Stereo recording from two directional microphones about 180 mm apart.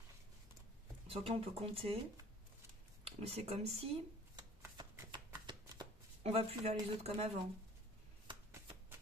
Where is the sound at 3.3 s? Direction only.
35° right (ahead or behind).